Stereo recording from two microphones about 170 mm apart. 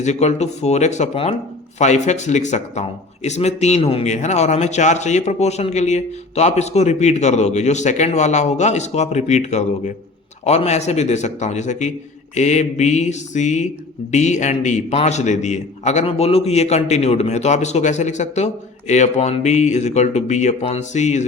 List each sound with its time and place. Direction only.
0.0 s a man's voice: 40° left (ahead or behind)